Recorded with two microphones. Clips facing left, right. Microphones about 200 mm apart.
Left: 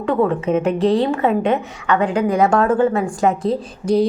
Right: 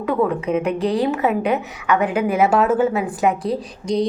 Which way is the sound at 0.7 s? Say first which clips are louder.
Left 6 dB; 30° left (ahead or behind).